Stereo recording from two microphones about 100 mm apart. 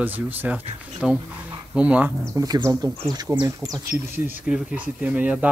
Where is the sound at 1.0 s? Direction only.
5° right (ahead or behind).